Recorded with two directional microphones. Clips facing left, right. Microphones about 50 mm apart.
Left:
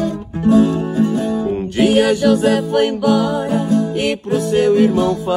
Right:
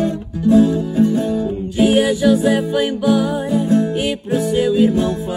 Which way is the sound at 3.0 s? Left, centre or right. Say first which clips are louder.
Left 1 dB; left.